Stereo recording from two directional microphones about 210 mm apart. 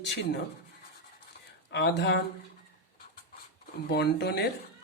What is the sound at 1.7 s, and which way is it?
Speech, 55° left (ahead or behind).